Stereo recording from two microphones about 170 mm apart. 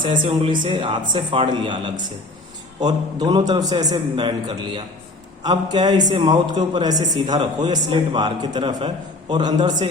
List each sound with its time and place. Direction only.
0.0 s speech: 30° right (ahead or behind)